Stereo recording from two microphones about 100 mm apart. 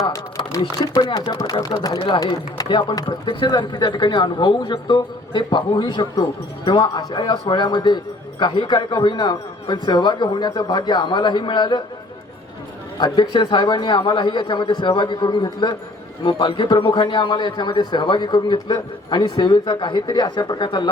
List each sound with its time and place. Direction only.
0.6 s speech: 40° left (ahead or behind)
2.0 s a man's voice: 55° left (ahead or behind)
13.3 s a man's voice: 50° left (ahead or behind)